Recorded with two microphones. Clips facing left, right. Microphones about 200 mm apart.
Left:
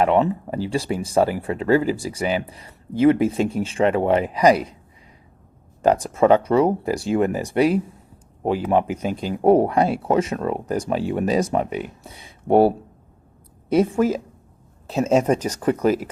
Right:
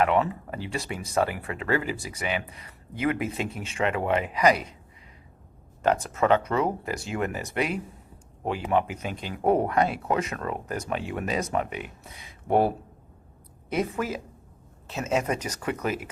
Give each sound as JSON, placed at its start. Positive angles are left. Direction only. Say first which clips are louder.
{"t": 0.0, "sound": "speech", "louder": "left 5 dB", "side_deg": 30}
{"t": 5.8, "sound": "speech", "louder": "left 7 dB", "side_deg": 35}